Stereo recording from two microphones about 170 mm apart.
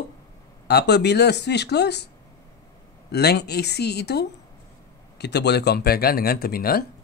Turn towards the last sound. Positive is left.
turn(degrees=60)  # may be behind; listen again after turning